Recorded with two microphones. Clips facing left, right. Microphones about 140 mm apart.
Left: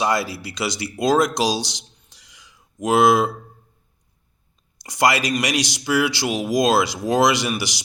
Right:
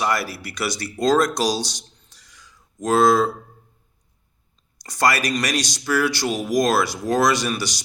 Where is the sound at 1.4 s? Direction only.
10° left (ahead or behind).